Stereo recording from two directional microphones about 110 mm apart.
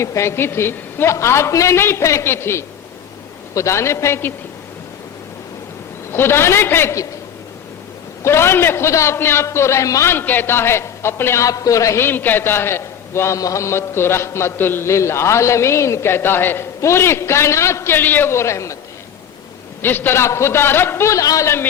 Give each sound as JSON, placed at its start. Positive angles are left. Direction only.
{"t": 0.0, "sound": "a man's voice", "side_deg": 25}
{"t": 6.1, "sound": "a man's voice", "side_deg": 20}
{"t": 8.2, "sound": "a man's voice", "side_deg": 25}
{"t": 19.8, "sound": "a man's voice", "side_deg": 20}